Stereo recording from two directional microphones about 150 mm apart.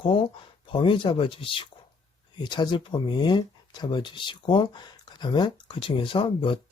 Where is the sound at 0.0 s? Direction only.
35° left (ahead or behind).